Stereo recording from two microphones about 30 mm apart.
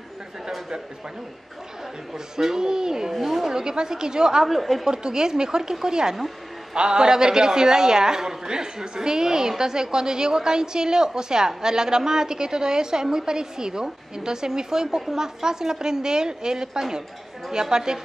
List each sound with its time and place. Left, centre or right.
2.1 s a woman's voice: centre
3.2 s speech: centre
3.5 s a woman's voice: right
4.5 s a woman's voice: centre
4.8 s a woman's voice: right